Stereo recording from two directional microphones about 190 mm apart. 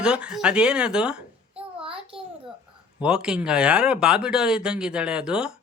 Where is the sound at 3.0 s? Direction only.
5° right (ahead or behind).